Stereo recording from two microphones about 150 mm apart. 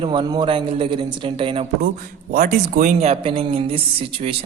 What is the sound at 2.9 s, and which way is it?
A man's voice, 40° right (ahead or behind).